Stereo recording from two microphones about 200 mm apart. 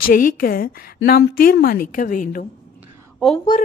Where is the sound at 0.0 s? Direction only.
45° left (ahead or behind).